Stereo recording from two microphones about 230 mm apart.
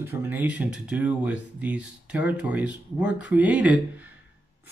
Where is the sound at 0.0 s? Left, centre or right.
Centre.